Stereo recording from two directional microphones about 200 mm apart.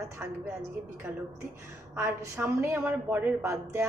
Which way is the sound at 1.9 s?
10° right (ahead or behind).